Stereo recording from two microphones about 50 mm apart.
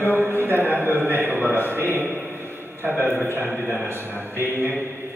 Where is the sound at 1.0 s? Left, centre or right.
Right.